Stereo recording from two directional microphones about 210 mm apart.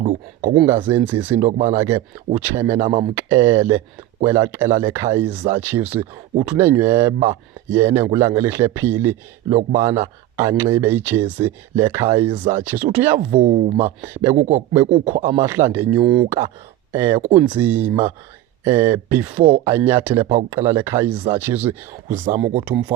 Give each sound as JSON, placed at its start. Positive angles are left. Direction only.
{"t": 0.6, "sound": "speech", "side_deg": -10}
{"t": 1.4, "sound": "speech", "side_deg": -35}
{"t": 1.6, "sound": "speech", "side_deg": -10}
{"t": 2.7, "sound": "speech", "side_deg": -25}
{"t": 3.2, "sound": "speech", "side_deg": -15}
{"t": 13.3, "sound": "speech", "side_deg": -30}
{"t": 14.1, "sound": "speech", "side_deg": -10}
{"t": 14.3, "sound": "speech", "side_deg": -35}
{"t": 15.3, "sound": "speech", "side_deg": -15}